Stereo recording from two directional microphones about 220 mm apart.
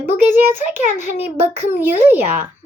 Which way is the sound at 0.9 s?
30° left (ahead or behind).